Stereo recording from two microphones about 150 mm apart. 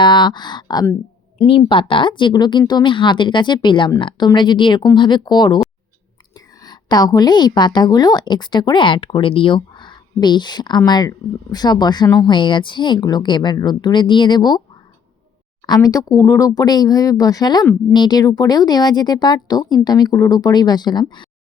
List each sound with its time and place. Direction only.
0.0 s a woman's voice: 30° left (ahead or behind)
15.6 s speech: 25° left (ahead or behind)